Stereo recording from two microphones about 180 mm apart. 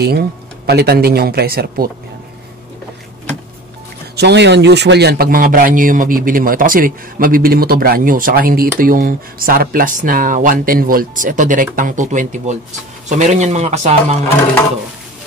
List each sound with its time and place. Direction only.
0.7 s speech: 60° right (ahead or behind)
4.2 s a man's voice: 70° right (ahead or behind); by 14.2 s 40° right (ahead or behind)